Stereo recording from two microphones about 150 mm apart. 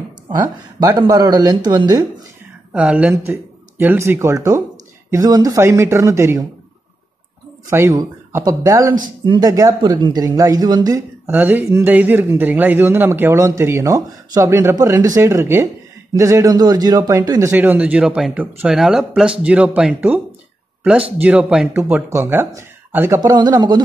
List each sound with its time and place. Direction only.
0.7 s speech: 25° right (ahead or behind)
2.7 s speech: 10° right (ahead or behind)
7.7 s speech: 20° right (ahead or behind)
11.2 s speech: 10° right (ahead or behind)
21.2 s speech: 10° right (ahead or behind); by 23.8 s 30° right (ahead or behind)